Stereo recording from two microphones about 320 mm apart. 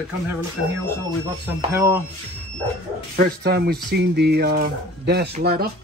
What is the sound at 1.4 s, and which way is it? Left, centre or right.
Speech, centre.